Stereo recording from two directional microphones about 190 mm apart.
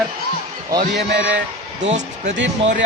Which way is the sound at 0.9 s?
65° right (ahead or behind).